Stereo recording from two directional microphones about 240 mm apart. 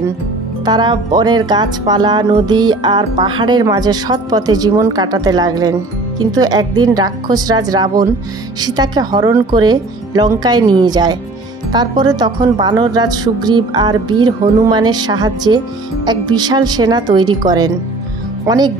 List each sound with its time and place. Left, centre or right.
0.7 s speech: centre